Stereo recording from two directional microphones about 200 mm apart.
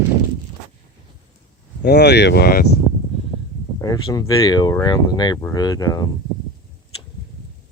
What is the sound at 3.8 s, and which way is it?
Speech, 20° left (ahead or behind).